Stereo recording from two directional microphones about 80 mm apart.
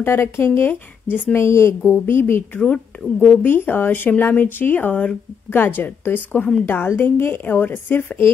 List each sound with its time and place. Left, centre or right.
0.0 s speech: left
1.4 s speech: left
2.6 s speech: centre
3.2 s speech: left